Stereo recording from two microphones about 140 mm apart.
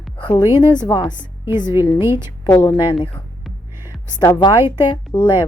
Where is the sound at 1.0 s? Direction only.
30° left (ahead or behind).